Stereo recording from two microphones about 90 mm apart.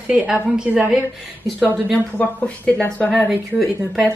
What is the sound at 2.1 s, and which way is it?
Speech, 15° left (ahead or behind).